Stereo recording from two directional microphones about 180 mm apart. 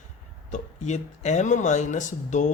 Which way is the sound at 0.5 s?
40° left (ahead or behind).